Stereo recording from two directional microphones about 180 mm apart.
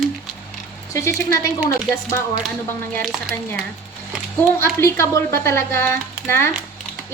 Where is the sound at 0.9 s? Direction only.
15° left (ahead or behind).